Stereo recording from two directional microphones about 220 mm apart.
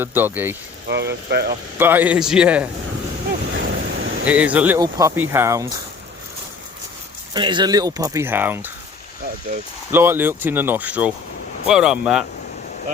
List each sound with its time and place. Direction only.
0.0 s speech: 10° right (ahead or behind)
0.9 s speech: 50° right (ahead or behind)
1.8 s a man's voice: 10° right (ahead or behind)
3.5 s a sound: 60° right (ahead or behind)
4.3 s speech: 5° right (ahead or behind)
7.3 s speech: 20° right (ahead or behind)
9.9 s a man's voice: 10° right (ahead or behind)